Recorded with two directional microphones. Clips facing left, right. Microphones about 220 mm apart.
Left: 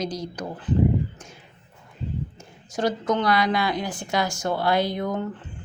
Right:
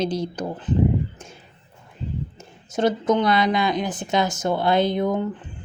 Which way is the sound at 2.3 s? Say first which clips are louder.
Right 4 dB; 25° right (ahead or behind).